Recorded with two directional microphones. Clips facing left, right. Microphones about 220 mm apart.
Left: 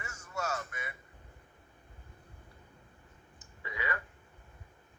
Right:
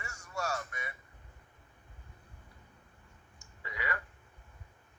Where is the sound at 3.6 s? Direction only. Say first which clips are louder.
Left 2 dB; 20° left (ahead or behind).